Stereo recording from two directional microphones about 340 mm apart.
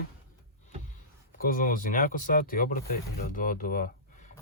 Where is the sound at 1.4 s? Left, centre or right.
Left.